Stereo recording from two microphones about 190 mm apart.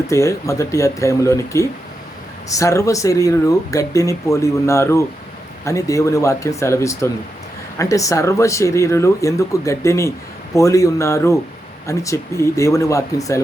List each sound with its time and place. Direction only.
0.1 s speech: 15° left (ahead or behind)